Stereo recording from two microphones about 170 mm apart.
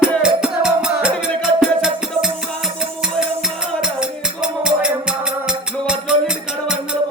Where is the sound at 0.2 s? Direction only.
5° right (ahead or behind).